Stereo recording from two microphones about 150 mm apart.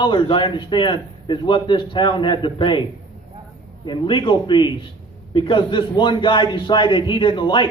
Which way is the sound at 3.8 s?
30° left (ahead or behind).